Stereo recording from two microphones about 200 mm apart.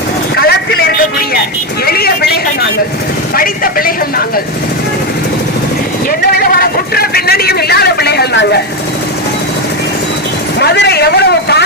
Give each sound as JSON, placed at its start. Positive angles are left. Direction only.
{"t": 0.3, "sound": "vehicle", "side_deg": 50}
{"t": 1.8, "sound": "a sound", "side_deg": 50}
{"t": 3.3, "sound": "vehicle", "side_deg": 45}
{"t": 6.1, "sound": "vehicle", "side_deg": 50}
{"t": 10.6, "sound": "a man's voice", "side_deg": 55}